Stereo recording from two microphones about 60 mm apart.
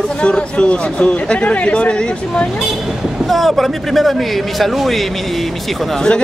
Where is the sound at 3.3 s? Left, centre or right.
Centre.